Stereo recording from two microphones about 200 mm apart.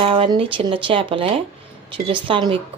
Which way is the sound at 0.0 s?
25° right (ahead or behind).